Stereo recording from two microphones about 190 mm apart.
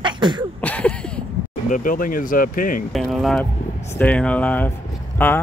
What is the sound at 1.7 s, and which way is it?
Speech, 45° left (ahead or behind).